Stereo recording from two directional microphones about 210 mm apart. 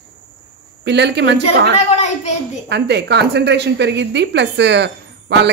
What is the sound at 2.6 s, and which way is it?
A woman's voice, 55° right (ahead or behind).